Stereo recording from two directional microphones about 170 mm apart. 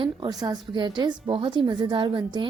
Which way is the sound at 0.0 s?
25° right (ahead or behind).